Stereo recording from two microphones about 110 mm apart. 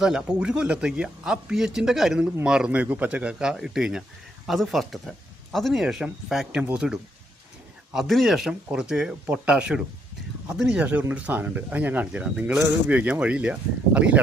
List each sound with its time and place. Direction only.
0.0 s speech: 5° right (ahead or behind)